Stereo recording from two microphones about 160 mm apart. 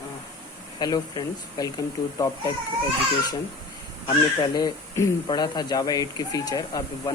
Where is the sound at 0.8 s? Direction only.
25° left (ahead or behind).